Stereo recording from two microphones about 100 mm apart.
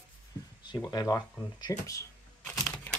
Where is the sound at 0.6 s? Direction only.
45° left (ahead or behind).